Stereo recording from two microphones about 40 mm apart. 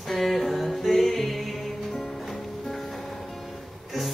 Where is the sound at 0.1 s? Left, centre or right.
Centre.